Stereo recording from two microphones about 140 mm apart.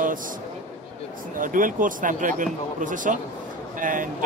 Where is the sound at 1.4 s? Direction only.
75° right (ahead or behind).